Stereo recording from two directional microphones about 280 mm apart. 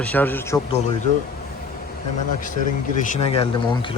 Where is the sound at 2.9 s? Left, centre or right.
Left.